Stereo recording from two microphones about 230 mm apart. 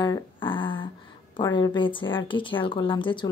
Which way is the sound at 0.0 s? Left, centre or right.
Centre.